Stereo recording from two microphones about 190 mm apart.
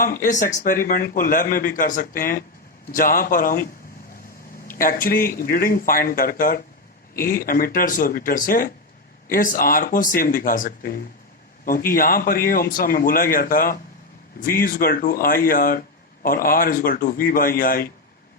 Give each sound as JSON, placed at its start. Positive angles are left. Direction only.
{"t": 0.0, "sound": "speech", "side_deg": 45}
{"t": 4.8, "sound": "speech", "side_deg": 50}